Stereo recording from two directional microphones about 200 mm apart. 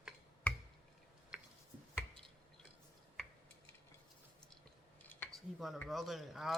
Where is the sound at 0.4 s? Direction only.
5° left (ahead or behind).